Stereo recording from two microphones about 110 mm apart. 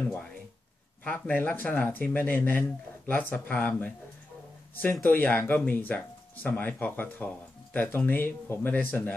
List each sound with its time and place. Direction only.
1.0 s speech: 15° left (ahead or behind)
5.1 s speech: 15° left (ahead or behind)